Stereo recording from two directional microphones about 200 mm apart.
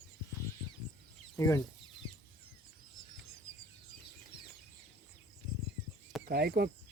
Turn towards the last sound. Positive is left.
turn(degrees=-50)  # may be behind; listen again after turning